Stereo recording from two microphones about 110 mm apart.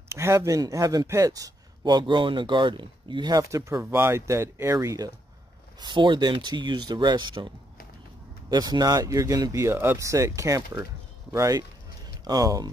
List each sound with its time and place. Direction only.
0.1 s speech: 25° right (ahead or behind)
3.8 s speech: 20° right (ahead or behind)
5.8 s speech: 45° right (ahead or behind)